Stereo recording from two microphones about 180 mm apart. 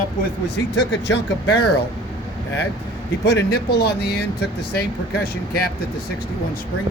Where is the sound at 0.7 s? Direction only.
85° left.